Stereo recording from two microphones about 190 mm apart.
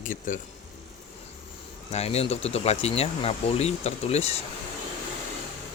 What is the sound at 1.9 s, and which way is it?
Speech, 35° left (ahead or behind).